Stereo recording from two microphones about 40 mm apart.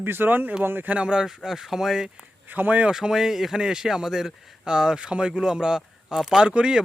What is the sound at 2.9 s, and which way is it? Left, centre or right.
Speech, centre.